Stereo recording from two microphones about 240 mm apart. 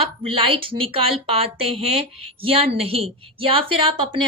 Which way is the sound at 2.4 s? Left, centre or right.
Right.